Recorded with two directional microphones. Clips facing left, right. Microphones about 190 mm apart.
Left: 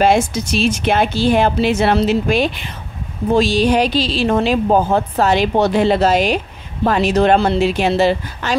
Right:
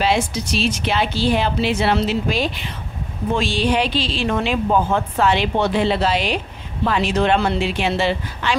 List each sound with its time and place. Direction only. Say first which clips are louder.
0.0 s speech: left 5 dB; 50° left (ahead or behind)
3.3 s speech: left 6 dB; 40° left (ahead or behind)